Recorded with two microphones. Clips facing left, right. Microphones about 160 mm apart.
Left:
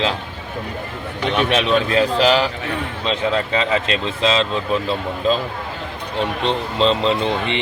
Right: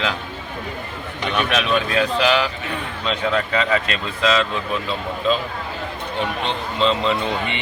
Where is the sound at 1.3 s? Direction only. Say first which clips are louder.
Left 3 dB; 30° left (ahead or behind).